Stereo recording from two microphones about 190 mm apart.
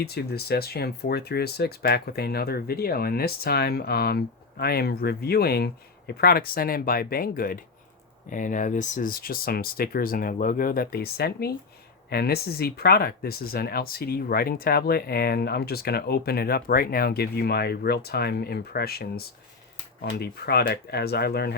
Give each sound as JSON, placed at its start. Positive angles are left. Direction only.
{"t": 0.0, "sound": "speech", "side_deg": 55}